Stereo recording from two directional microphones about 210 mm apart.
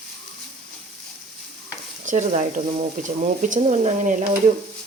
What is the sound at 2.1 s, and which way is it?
Speech, 35° right (ahead or behind).